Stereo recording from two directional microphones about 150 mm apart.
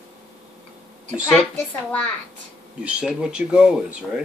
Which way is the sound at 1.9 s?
10° left (ahead or behind).